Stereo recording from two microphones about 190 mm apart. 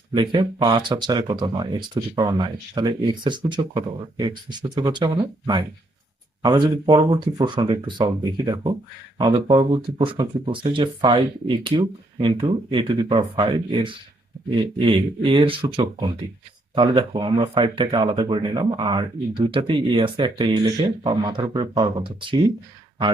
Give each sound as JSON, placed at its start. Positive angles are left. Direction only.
{"t": 0.1, "sound": "speech", "side_deg": -25}